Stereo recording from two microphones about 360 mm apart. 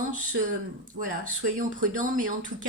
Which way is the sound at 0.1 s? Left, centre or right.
Right.